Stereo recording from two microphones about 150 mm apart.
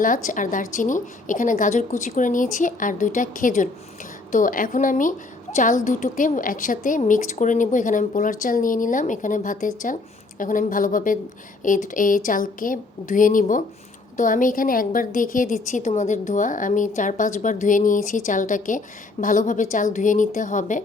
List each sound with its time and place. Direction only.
0.0 s a woman's voice: 60° left (ahead or behind)